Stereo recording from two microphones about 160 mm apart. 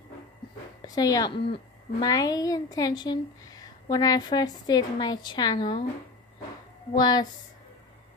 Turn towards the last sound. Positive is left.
turn(degrees=25)  # may be behind; listen again after turning